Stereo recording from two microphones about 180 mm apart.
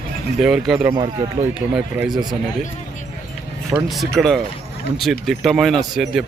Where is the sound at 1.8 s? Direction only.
5° right (ahead or behind).